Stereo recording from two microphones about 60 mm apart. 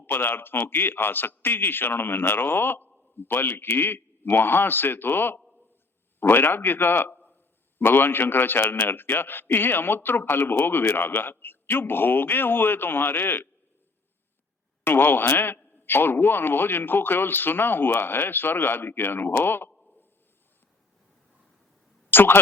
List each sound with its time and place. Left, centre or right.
0.0 s a man's voice: left
14.8 s a man's voice: left
22.1 s speech: left